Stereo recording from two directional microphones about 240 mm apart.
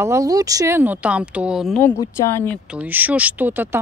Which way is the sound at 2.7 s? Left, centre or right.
Centre.